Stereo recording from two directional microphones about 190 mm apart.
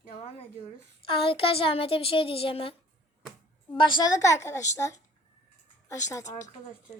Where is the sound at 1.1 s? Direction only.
30° left (ahead or behind).